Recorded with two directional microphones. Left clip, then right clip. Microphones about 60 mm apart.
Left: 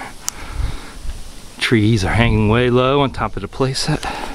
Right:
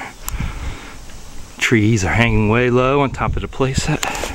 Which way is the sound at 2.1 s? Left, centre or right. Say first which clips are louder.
Right 1 dB; left.